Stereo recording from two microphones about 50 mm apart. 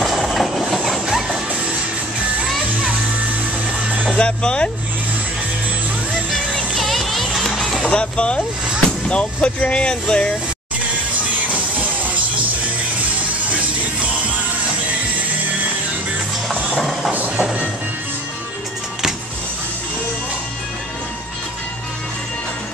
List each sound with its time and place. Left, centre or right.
0.0 s train: centre
1.0 s music: centre
4.2 s speech: centre
6.7 s music: centre
7.8 s speech: left
13.5 s music: right
16.4 s a sound: centre
17.1 s music: right